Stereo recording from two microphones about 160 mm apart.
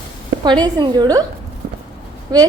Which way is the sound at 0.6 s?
25° right (ahead or behind).